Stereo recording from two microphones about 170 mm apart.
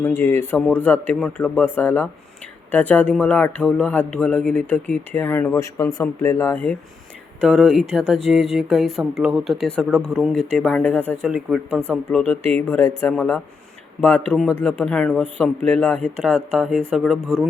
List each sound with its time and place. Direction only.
0.2 s speech: 15° left (ahead or behind)
7.4 s speech: centre (ahead or behind)
11.3 s speech: centre (ahead or behind)
17.2 s speech: 15° right (ahead or behind)